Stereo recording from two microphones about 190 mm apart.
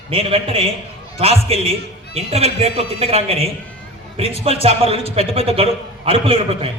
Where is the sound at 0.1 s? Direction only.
30° right (ahead or behind).